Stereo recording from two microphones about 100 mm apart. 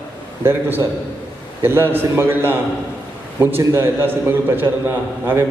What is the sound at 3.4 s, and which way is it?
A man's voice, 25° right (ahead or behind).